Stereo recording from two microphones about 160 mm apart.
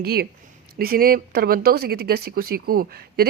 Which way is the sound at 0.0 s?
75° right (ahead or behind).